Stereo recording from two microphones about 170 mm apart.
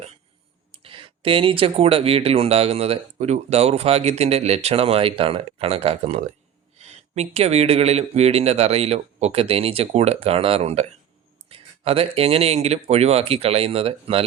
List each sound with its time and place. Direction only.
0.7 s speech: 30° right (ahead or behind)